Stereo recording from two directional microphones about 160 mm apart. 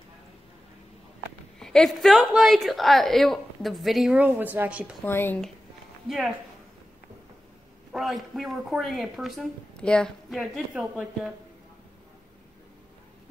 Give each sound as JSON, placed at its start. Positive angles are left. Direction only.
{"t": 1.6, "sound": "a woman's voice", "side_deg": 5}
{"t": 5.0, "sound": "speech", "side_deg": 15}
{"t": 6.0, "sound": "a woman's voice", "side_deg": 0}
{"t": 7.9, "sound": "a woman's voice", "side_deg": 0}